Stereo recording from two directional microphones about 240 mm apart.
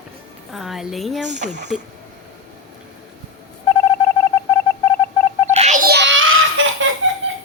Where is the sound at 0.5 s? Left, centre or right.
Centre.